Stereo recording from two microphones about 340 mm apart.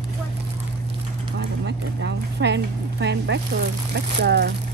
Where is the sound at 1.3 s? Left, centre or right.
Right.